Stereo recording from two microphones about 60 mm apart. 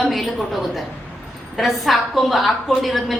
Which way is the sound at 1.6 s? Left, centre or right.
Centre.